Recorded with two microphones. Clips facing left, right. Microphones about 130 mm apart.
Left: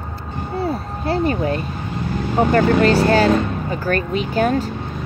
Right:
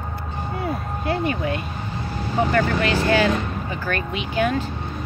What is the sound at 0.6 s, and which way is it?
Speech, 35° left (ahead or behind).